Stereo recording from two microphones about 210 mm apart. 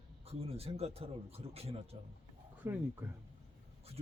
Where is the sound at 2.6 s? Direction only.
10° right (ahead or behind).